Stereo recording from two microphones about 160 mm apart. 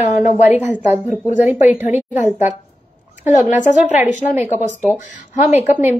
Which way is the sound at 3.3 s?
50° left (ahead or behind).